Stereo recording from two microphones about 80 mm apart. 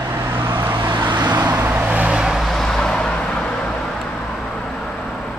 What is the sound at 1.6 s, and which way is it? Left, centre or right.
Vehicle, centre.